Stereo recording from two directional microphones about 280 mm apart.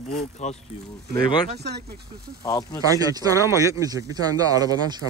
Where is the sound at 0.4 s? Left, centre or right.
Left.